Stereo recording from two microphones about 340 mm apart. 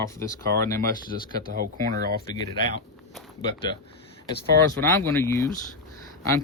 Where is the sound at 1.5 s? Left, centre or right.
Right.